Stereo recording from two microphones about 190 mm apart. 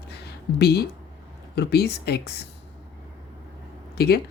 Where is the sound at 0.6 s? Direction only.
55° left (ahead or behind).